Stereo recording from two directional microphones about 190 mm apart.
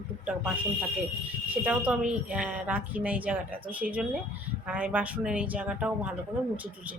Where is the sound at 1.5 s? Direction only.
5° right (ahead or behind).